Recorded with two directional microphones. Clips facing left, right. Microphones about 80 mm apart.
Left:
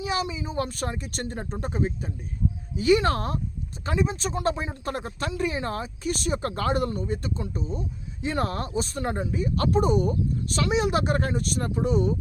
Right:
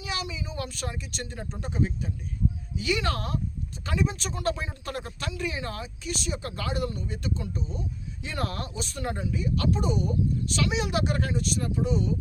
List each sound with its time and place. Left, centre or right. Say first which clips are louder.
0.0 s speech: left 6 dB; left